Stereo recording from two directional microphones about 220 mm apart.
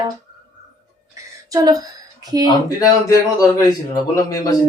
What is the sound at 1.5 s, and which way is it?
Speech, 15° right (ahead or behind).